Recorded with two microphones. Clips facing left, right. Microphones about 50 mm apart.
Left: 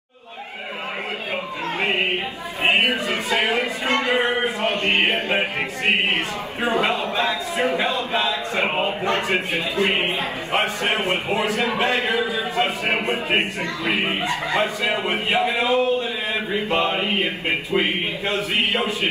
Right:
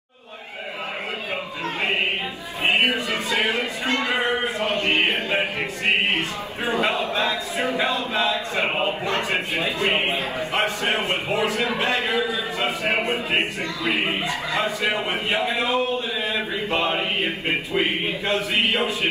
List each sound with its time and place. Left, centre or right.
1.8 s choir: left
2.9 s a sound: left
8.1 s speech: left
18.7 s a man's voice: right